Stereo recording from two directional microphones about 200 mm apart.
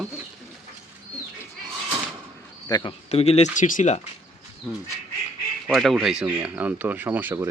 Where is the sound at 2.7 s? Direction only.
20° left (ahead or behind).